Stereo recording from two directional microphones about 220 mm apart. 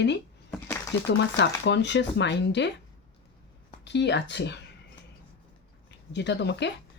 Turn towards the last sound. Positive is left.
turn(degrees=50)  # may be behind; listen again after turning